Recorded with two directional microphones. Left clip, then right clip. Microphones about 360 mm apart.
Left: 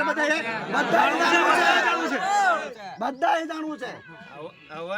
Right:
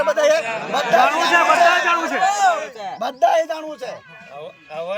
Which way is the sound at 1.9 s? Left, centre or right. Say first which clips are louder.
Right 5 dB; centre.